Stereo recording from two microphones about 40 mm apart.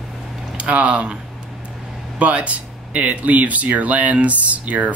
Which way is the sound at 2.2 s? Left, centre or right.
Right.